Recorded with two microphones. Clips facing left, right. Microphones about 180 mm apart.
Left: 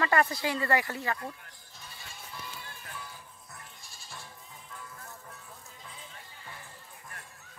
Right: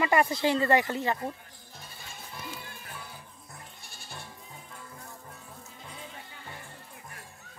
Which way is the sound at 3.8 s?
65° right (ahead or behind).